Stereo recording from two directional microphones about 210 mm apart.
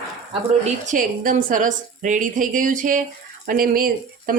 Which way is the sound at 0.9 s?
40° right (ahead or behind).